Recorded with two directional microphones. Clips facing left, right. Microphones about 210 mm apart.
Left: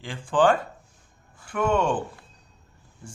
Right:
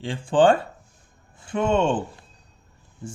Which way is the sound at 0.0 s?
30° right (ahead or behind).